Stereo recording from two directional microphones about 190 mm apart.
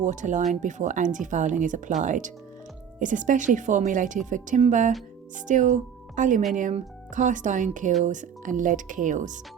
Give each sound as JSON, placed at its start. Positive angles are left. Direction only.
{"t": 0.0, "sound": "a woman's voice", "side_deg": -40}